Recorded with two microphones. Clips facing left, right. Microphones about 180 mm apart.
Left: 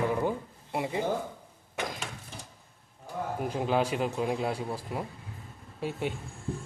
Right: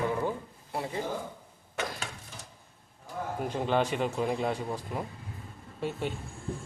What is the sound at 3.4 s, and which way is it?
Speech, 5° left (ahead or behind).